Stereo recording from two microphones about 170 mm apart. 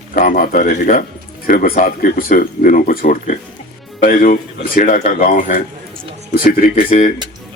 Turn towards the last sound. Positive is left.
turn(degrees=50)  # may be behind; listen again after turning